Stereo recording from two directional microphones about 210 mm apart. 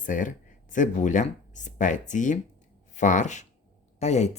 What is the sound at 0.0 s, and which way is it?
Speech, 40° left (ahead or behind).